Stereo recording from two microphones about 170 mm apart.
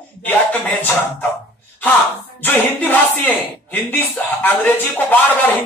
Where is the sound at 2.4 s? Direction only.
10° left (ahead or behind).